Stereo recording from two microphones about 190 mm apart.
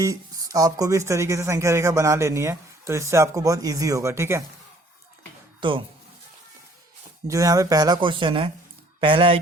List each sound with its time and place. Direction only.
0.0 s speech: 20° right (ahead or behind)
5.5 s speech: 25° right (ahead or behind)
7.3 s speech: 15° right (ahead or behind)